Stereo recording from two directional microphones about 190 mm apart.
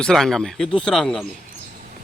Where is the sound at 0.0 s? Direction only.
Centre (ahead or behind).